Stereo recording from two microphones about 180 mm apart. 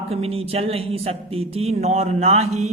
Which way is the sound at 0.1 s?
35° right (ahead or behind).